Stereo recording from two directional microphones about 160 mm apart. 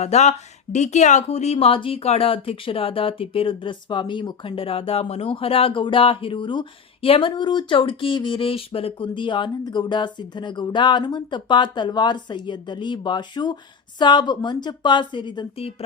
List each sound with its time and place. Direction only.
0.0 s a woman's voice: 45° left (ahead or behind)